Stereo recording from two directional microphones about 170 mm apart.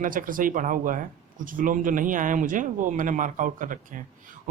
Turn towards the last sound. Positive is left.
turn(degrees=-50)  # may be behind; listen again after turning